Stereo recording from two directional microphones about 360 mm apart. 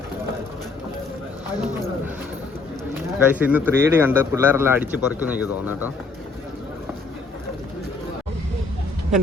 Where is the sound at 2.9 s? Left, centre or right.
Centre.